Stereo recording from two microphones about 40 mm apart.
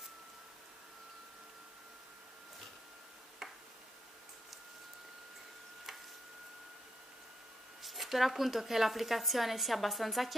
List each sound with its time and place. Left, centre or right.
7.8 s a woman's voice: centre